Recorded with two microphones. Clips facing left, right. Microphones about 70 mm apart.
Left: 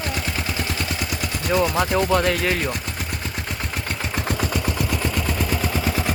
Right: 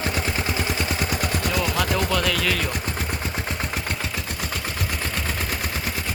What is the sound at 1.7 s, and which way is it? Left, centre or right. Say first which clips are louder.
Speech: left 4 dB; left.